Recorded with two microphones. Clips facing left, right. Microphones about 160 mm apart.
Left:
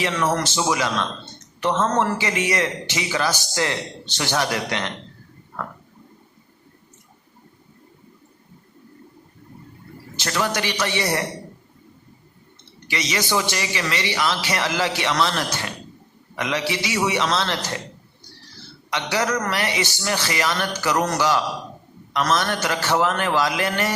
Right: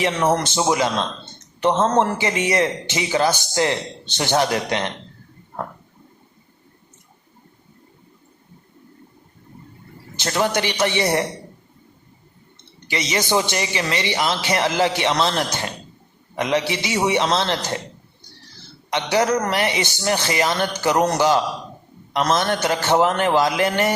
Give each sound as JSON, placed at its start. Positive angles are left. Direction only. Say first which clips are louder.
{"t": 0.0, "sound": "a man's voice", "louder": "right 3 dB", "side_deg": -25}
{"t": 10.2, "sound": "a man's voice", "louder": "right 3 dB", "side_deg": -25}
{"t": 12.9, "sound": "a man's voice", "louder": "right 3 dB", "side_deg": -25}
{"t": 18.9, "sound": "a man's voice", "louder": "right 4 dB", "side_deg": -20}